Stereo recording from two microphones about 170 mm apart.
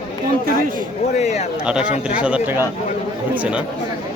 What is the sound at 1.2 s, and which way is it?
Speech, 40° left (ahead or behind).